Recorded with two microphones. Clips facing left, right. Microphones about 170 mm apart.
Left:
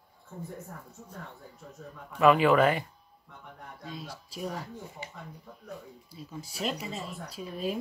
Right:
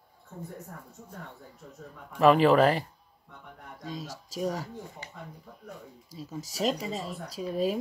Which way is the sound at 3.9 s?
40° right (ahead or behind).